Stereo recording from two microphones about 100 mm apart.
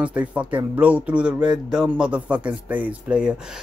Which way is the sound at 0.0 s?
15° right (ahead or behind).